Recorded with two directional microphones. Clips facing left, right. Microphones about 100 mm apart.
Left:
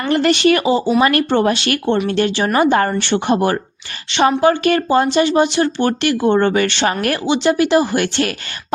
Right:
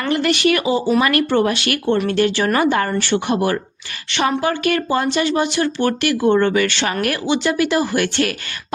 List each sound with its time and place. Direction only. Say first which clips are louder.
0.1 s speech: left 4 dB; 35° left (ahead or behind)